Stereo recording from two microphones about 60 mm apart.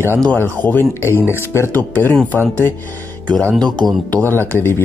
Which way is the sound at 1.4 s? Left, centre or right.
Left.